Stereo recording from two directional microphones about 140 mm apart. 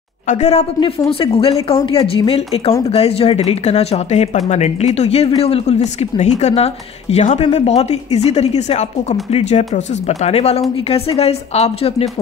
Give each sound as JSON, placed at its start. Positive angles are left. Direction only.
{"t": 0.3, "sound": "speech", "side_deg": 50}
{"t": 0.7, "sound": "speech", "side_deg": 40}